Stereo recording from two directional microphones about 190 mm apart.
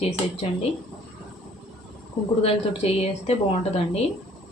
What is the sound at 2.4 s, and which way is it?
Speech, 30° left (ahead or behind).